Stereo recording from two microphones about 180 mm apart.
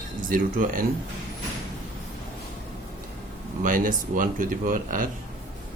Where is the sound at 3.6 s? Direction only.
50° right (ahead or behind).